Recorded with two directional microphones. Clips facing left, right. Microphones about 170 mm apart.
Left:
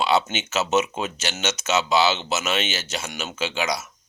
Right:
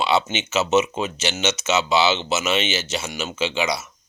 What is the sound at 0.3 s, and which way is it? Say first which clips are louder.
Speech: right 3 dB; centre (ahead or behind).